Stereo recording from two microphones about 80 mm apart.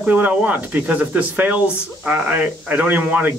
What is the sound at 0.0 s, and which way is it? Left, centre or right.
Speech, centre.